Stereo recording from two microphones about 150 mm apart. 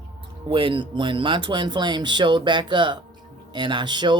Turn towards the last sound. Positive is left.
turn(degrees=-30)  # may be behind; listen again after turning